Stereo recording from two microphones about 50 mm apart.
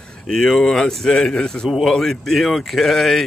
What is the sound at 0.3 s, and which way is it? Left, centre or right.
Speech, centre.